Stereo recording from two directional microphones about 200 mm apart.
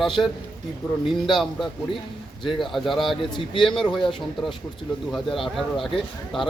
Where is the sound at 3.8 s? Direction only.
Centre (ahead or behind).